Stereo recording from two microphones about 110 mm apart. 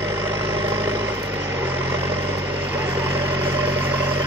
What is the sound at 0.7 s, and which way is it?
Vehicle, 20° right (ahead or behind).